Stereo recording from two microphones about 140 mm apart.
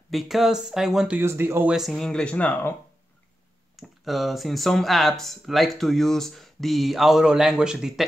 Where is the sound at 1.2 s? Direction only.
20° right (ahead or behind).